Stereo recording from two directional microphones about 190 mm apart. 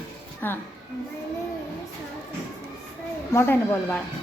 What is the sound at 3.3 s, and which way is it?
Speech, 15° left (ahead or behind).